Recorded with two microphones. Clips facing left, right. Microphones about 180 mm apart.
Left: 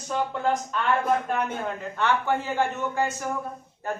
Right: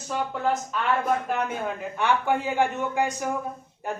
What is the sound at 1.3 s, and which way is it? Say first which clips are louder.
A man's voice: even; 5° right (ahead or behind).